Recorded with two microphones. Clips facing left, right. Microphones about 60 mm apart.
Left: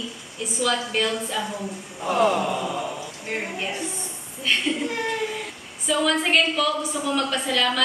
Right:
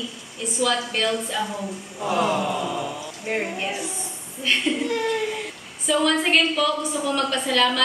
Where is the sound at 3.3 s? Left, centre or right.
Centre.